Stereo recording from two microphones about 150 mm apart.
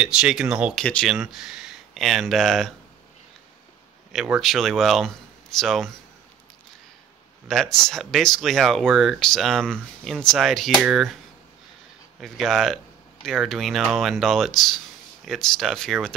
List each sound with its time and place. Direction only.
0.0 s speech: 5° right (ahead or behind)
4.1 s speech: centre (ahead or behind)
7.4 s speech: centre (ahead or behind)
12.2 s speech: centre (ahead or behind)